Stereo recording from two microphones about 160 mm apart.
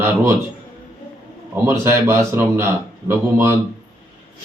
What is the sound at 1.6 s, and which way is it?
A man's voice, 15° right (ahead or behind).